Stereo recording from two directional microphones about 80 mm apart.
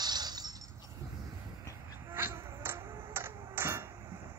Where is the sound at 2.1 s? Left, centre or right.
Right.